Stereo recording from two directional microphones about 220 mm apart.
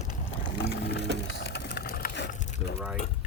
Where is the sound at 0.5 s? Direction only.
50° left (ahead or behind).